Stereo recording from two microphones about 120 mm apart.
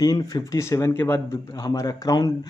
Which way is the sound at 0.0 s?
30° left (ahead or behind).